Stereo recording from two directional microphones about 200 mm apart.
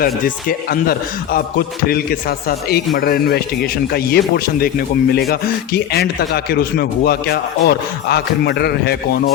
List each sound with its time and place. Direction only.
0.0 s speech: 45° left (ahead or behind)